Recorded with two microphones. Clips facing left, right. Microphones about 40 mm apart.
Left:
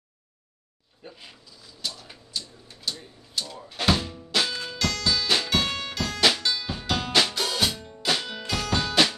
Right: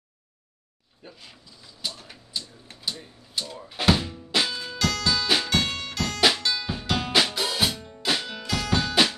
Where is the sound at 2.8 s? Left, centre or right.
Centre.